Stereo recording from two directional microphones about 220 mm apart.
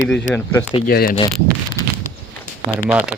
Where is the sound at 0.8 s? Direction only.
40° left (ahead or behind).